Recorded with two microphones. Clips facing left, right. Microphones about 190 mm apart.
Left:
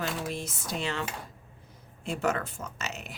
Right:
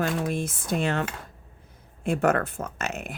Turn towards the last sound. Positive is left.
turn(degrees=-55)  # may be behind; listen again after turning